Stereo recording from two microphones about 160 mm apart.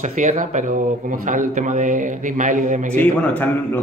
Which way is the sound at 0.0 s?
50° right (ahead or behind).